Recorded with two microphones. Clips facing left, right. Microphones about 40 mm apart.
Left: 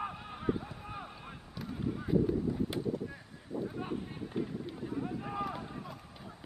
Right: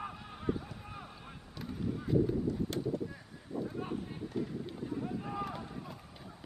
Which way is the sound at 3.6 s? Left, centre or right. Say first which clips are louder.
Left 1 dB; centre.